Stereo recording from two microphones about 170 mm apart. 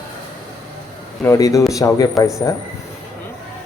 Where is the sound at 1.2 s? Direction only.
20° left (ahead or behind).